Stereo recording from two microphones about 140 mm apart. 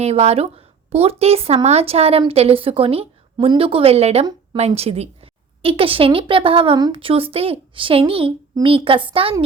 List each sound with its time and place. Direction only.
0.0 s a woman's voice: 50° right (ahead or behind)